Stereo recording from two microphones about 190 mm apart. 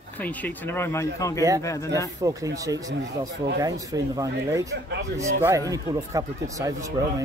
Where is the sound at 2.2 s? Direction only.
15° right (ahead or behind).